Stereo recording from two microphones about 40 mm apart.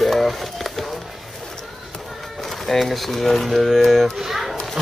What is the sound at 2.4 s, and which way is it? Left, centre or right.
A man's voice, centre.